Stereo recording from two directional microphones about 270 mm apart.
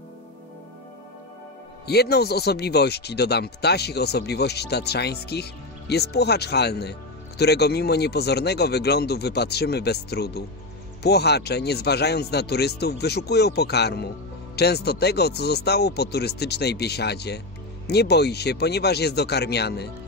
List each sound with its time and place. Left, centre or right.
1.9 s speech: left